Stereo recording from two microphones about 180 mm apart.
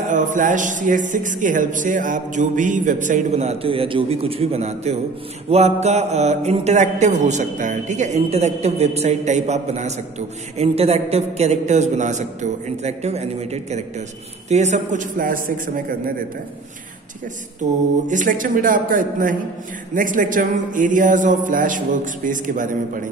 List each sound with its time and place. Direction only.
0.1 s speech: 45° right (ahead or behind)
5.5 s mantra: 35° right (ahead or behind)
14.5 s speech: 40° right (ahead or behind)
17.6 s speech: 45° right (ahead or behind)